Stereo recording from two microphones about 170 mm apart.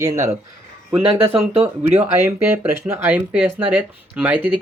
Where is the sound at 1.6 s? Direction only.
40° right (ahead or behind).